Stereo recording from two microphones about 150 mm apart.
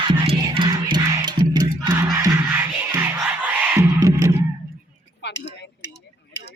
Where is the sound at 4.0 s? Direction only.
25° right (ahead or behind).